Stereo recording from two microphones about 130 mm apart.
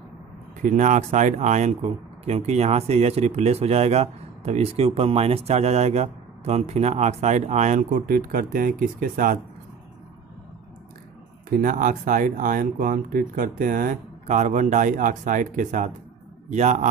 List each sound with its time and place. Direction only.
0.6 s speech: 70° right (ahead or behind); by 9.4 s 90° right
11.6 s speech: 90° right
16.4 s speech: 65° right (ahead or behind)